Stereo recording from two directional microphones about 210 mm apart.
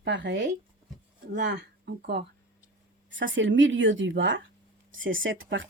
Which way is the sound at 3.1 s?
60° right (ahead or behind).